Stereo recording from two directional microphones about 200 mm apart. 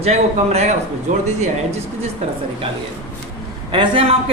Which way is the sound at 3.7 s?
25° right (ahead or behind).